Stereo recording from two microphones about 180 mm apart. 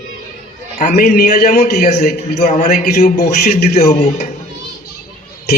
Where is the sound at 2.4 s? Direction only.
40° left (ahead or behind).